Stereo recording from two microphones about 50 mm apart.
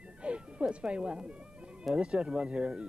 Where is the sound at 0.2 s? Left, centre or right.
Right.